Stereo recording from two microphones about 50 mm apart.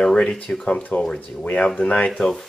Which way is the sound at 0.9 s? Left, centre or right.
Left.